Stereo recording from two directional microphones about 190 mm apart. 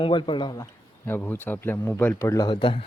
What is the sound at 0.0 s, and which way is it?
A man's voice, 25° left (ahead or behind).